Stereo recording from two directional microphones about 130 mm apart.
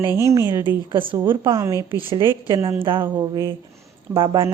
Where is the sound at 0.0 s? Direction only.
20° right (ahead or behind).